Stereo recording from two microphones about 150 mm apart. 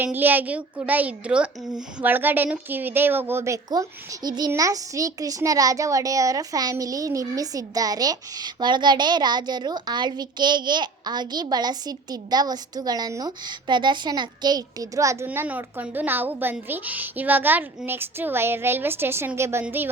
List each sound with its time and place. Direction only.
0.0 s a child's voice: 10° right (ahead or behind)